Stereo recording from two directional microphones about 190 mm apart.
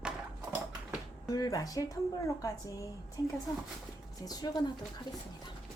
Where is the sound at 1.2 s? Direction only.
20° left (ahead or behind).